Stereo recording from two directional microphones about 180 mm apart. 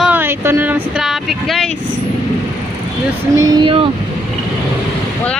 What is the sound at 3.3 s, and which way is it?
Speech, 20° right (ahead or behind).